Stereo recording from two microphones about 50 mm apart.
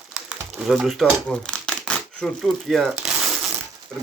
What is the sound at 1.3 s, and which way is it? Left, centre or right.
Crumpling, left.